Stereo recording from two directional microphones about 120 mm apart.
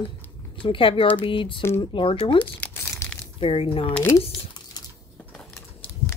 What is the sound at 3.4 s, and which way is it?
Speech, 50° left (ahead or behind).